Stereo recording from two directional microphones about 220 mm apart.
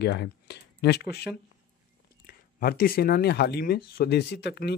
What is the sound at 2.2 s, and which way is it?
Speech, 40° left (ahead or behind).